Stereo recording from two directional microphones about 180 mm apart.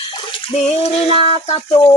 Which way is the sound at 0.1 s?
30° left (ahead or behind).